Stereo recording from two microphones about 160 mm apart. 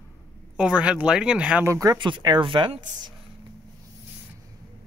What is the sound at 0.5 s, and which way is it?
Speech, 5° right (ahead or behind).